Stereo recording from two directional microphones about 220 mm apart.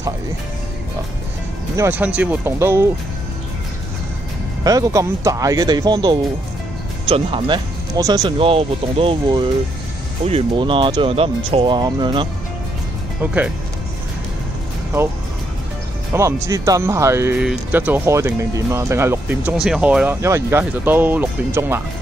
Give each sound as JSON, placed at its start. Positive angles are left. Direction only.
{"t": 1.8, "sound": "speech", "side_deg": -10}
{"t": 4.6, "sound": "speech", "side_deg": -15}
{"t": 13.2, "sound": "speech", "side_deg": -5}
{"t": 16.1, "sound": "speech", "side_deg": -15}